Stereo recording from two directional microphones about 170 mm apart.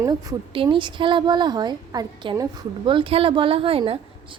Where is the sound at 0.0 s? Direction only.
20° right (ahead or behind).